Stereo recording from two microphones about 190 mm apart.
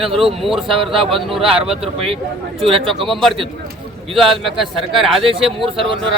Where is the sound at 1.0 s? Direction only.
30° right (ahead or behind).